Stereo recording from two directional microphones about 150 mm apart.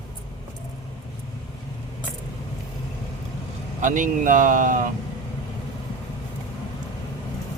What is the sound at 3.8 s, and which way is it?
Speech, 60° right (ahead or behind).